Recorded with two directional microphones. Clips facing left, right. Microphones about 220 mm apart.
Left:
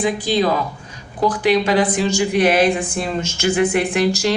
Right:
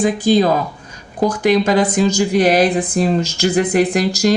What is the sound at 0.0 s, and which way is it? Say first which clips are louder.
Speech: right 4 dB; 45° right (ahead or behind).